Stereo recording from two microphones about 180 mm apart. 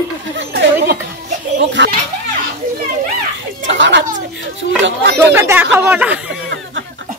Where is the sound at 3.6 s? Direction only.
90° right.